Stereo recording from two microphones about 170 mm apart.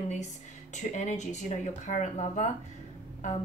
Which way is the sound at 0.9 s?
45° left (ahead or behind).